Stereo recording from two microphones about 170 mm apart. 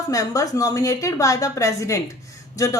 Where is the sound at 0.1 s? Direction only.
20° left (ahead or behind).